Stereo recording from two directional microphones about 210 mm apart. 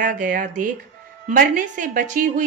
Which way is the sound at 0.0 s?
40° right (ahead or behind).